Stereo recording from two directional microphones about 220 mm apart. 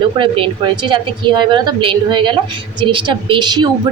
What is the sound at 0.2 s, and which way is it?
A woman's voice, 25° right (ahead or behind).